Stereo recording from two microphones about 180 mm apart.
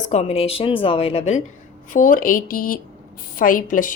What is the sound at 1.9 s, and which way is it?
A woman's voice, 50° left (ahead or behind).